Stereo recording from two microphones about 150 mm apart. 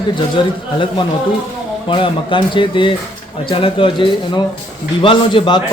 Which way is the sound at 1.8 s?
35° left (ahead or behind).